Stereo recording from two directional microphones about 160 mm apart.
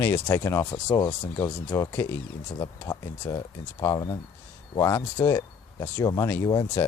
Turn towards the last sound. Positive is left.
turn(degrees=25)  # may be behind; listen again after turning